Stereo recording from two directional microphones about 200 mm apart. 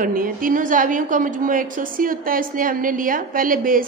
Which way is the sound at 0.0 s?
45° right (ahead or behind).